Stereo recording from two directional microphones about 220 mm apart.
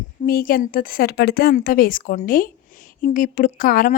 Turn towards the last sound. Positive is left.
turn(degrees=40)  # may be behind; listen again after turning